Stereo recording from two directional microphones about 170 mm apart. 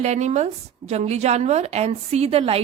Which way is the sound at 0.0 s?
40° right (ahead or behind).